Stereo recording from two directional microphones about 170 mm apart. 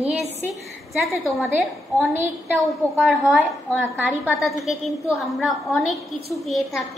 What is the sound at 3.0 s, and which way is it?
A woman's voice, centre (ahead or behind).